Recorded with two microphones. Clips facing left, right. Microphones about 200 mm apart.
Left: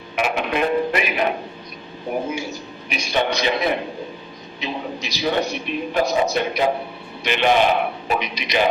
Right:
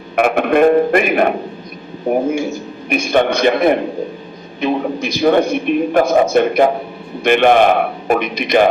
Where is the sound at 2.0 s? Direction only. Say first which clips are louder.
Right 9 dB; 50° right (ahead or behind).